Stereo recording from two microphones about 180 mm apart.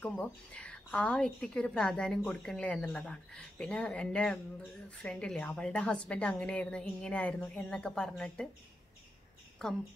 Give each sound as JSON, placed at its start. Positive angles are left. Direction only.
{"t": 0.0, "sound": "a woman's voice", "side_deg": 5}
{"t": 9.6, "sound": "a woman's voice", "side_deg": 5}